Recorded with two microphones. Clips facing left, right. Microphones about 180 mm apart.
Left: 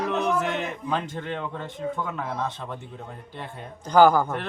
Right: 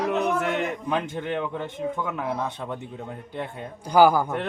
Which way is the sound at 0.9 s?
10° right (ahead or behind).